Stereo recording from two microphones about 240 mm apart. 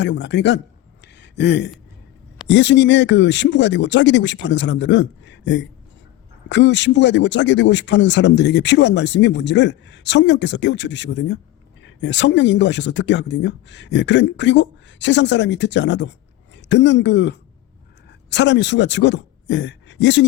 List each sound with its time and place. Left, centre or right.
0.0 s speech: left
1.0 s a sound: left
2.5 s speech: left